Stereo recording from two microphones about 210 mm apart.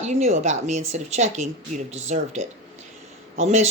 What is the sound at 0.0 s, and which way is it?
Speech, 30° right (ahead or behind).